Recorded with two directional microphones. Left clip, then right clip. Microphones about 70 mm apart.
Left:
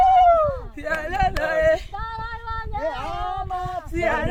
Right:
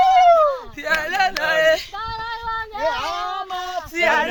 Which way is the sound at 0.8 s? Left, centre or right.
Centre.